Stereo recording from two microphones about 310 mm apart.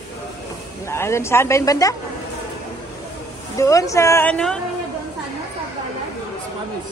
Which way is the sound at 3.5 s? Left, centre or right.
Centre.